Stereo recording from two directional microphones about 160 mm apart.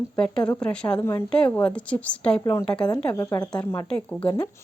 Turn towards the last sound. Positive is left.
turn(degrees=10)  # may be behind; listen again after turning